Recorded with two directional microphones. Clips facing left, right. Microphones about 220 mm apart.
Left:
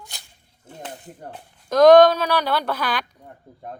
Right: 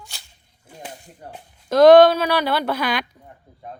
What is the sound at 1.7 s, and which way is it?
Speech, 5° right (ahead or behind).